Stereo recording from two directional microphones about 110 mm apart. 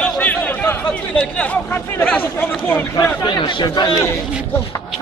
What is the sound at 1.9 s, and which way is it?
Speech, 15° left (ahead or behind).